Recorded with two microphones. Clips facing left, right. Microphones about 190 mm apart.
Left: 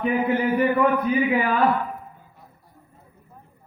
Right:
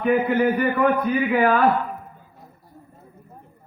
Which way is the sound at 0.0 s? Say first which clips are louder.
Right 3 dB; 50° right (ahead or behind).